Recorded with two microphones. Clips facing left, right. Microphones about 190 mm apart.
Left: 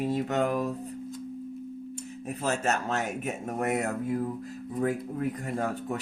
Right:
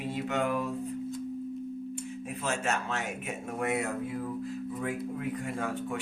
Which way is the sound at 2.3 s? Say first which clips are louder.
Left 4 dB; 40° left (ahead or behind).